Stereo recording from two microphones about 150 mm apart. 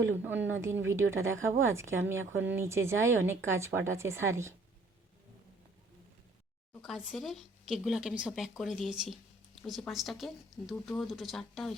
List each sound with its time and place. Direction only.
0.2 s a woman's voice: 15° right (ahead or behind)
6.8 s speech: 5° right (ahead or behind)